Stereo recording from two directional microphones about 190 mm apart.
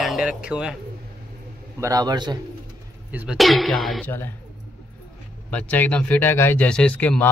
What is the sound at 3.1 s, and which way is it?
Speech, 5° right (ahead or behind).